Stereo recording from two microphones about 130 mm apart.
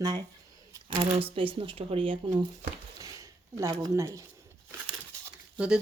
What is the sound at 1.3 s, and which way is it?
Speech, 40° right (ahead or behind).